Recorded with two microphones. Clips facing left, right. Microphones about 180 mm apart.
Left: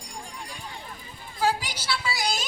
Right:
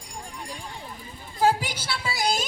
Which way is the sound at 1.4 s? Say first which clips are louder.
Right 3 dB; 50° right (ahead or behind).